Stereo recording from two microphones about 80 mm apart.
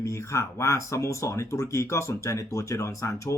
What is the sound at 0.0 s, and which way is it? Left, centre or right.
Speech, left.